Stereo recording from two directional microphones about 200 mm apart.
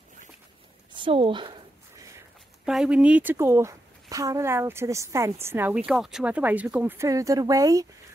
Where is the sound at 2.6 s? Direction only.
5° right (ahead or behind).